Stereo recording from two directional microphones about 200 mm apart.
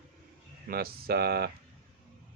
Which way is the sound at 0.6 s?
50° right (ahead or behind).